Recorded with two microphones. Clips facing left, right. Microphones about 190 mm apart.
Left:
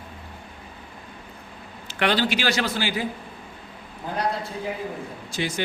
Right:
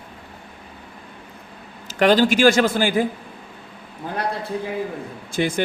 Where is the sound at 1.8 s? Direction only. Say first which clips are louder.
Right 7 dB; 40° right (ahead or behind).